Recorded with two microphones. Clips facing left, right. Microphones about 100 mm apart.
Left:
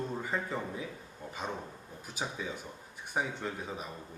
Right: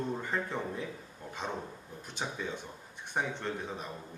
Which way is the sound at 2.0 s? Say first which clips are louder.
Even; 5° left (ahead or behind).